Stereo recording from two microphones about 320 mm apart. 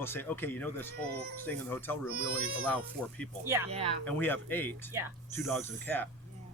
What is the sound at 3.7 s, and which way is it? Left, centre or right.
Speech, centre.